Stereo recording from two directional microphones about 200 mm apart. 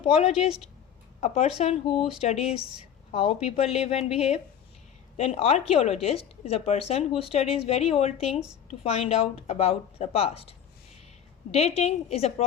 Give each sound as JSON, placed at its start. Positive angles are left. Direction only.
{"t": 0.3, "sound": "speech", "side_deg": 0}
{"t": 1.2, "sound": "a woman's voice", "side_deg": 30}
{"t": 11.5, "sound": "a woman's voice", "side_deg": 30}